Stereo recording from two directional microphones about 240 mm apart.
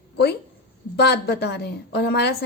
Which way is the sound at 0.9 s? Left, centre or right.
Left.